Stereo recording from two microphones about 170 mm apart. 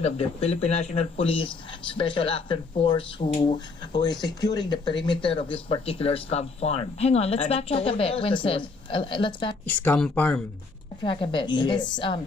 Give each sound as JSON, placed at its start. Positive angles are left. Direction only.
{"t": 0.0, "sound": "speech", "side_deg": 40}
{"t": 9.7, "sound": "speech", "side_deg": 10}
{"t": 11.0, "sound": "a woman's voice", "side_deg": 30}